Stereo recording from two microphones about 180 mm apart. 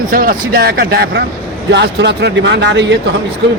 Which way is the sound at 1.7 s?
70° right (ahead or behind).